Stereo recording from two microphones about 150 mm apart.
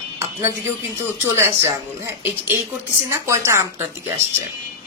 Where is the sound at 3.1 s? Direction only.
20° right (ahead or behind).